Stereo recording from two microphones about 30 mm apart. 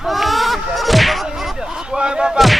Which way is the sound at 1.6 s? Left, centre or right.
Right.